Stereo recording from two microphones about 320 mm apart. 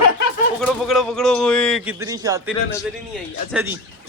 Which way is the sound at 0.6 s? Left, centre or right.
Centre.